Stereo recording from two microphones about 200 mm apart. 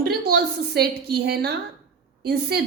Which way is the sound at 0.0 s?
50° right (ahead or behind).